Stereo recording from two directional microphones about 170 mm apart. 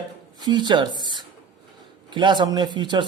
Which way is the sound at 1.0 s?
25° right (ahead or behind).